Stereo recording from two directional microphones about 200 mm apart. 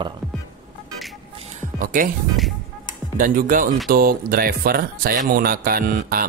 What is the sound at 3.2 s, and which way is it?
Speech, 45° right (ahead or behind).